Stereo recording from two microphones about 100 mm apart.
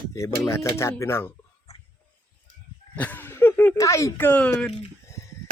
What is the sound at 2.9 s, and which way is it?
Chuckle, 15° left (ahead or behind).